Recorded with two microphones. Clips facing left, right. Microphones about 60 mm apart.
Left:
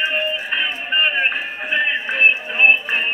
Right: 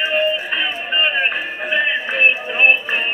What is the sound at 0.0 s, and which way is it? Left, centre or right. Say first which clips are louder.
Music: right 3 dB; left.